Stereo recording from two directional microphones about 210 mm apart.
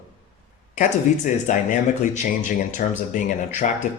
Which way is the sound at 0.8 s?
35° left (ahead or behind).